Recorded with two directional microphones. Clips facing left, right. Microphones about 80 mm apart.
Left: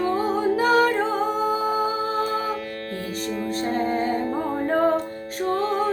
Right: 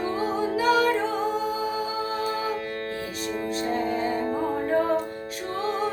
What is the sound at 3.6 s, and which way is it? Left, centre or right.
Music, left.